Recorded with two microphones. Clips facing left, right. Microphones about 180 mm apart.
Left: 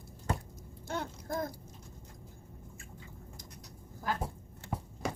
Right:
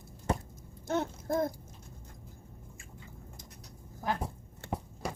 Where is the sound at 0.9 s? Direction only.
25° right (ahead or behind).